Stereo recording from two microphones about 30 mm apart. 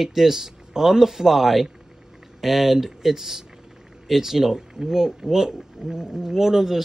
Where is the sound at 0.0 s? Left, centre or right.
Centre.